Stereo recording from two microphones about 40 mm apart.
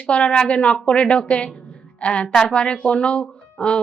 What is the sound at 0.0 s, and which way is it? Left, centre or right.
A woman's voice, left.